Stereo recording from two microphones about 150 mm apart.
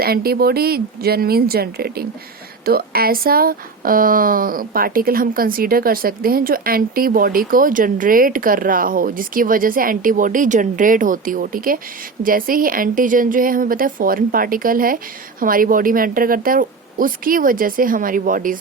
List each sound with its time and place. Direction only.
0.0 s speech: 90° right; by 18.5 s 65° right (ahead or behind)